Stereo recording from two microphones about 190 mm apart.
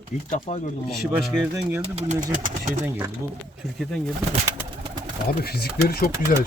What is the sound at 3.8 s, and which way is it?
Speech, 5° left (ahead or behind).